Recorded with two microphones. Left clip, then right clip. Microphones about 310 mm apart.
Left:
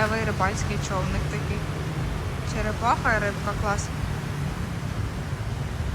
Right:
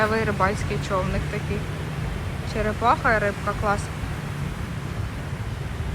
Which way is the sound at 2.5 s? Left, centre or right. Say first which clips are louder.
Right 3 dB; centre.